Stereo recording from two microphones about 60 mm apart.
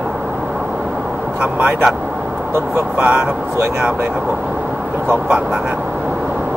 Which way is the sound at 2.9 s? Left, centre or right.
Right.